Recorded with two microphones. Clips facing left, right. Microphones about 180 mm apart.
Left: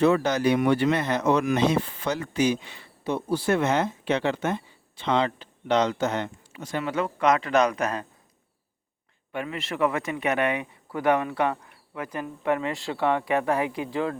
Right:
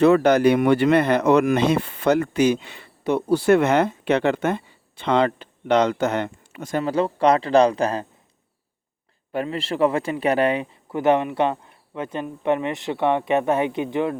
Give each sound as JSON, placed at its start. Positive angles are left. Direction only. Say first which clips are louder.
{"t": 0.0, "sound": "speech", "louder": "right 6 dB", "side_deg": -60}
{"t": 6.8, "sound": "a man's voice", "louder": "right 4 dB", "side_deg": -35}
{"t": 9.3, "sound": "speech", "louder": "right 6 dB", "side_deg": -35}